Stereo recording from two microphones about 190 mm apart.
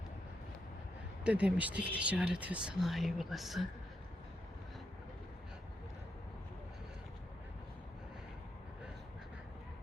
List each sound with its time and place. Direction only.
1.2 s speech: 5° right (ahead or behind)